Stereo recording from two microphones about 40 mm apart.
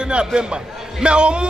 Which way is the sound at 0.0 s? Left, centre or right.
Right.